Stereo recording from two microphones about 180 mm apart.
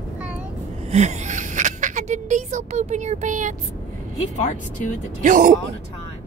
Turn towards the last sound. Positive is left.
turn(degrees=-45)  # may be behind; listen again after turning